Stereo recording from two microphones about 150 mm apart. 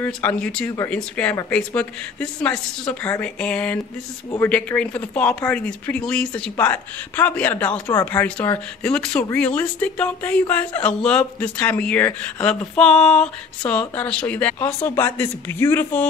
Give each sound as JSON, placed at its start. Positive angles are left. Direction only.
{"t": 0.0, "sound": "speech", "side_deg": 10}
{"t": 0.7, "sound": "speech", "side_deg": 15}